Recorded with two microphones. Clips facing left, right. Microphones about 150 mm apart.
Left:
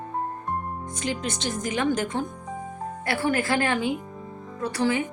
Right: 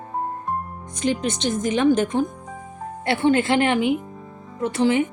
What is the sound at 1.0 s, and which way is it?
A woman's voice, 20° right (ahead or behind).